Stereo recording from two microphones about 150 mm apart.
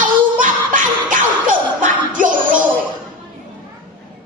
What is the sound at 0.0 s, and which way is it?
Music, 60° right (ahead or behind).